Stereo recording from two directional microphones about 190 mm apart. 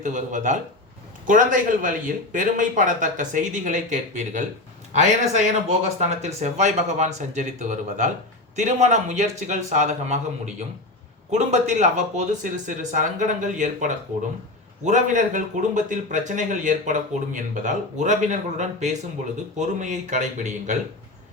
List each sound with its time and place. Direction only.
0.0 s a man's voice: 40° right (ahead or behind)